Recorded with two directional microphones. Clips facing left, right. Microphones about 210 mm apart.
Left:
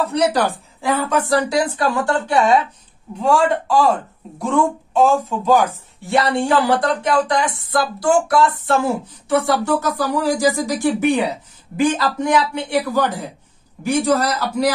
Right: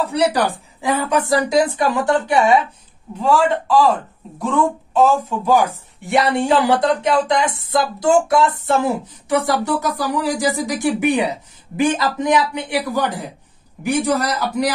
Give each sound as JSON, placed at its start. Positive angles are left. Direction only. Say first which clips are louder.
{"t": 0.1, "sound": "a man's voice", "louder": "even", "side_deg": -15}
{"t": 3.2, "sound": "speech", "louder": "even", "side_deg": 0}
{"t": 6.0, "sound": "a man's voice", "louder": "right 1 dB", "side_deg": -15}